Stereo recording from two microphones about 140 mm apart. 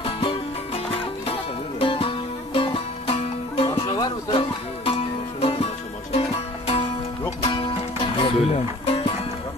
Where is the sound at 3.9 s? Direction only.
25° left (ahead or behind).